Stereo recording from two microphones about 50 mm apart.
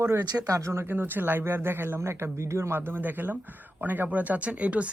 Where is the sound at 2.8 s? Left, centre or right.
Right.